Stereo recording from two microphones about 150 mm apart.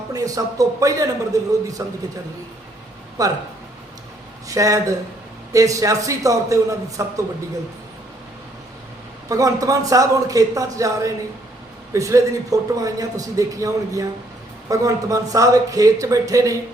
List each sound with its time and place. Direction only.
0.1 s a man's voice: 25° right (ahead or behind)
3.2 s a man's voice: 25° right (ahead or behind)
4.4 s a man's voice: 20° right (ahead or behind)
9.3 s a man's voice: 20° right (ahead or behind)